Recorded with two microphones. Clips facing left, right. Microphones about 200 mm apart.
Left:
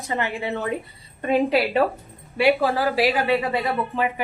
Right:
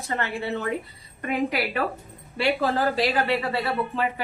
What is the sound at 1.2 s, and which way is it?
Speech, 30° left (ahead or behind).